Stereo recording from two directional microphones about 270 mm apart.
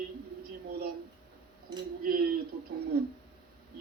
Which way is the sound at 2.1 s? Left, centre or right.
Right.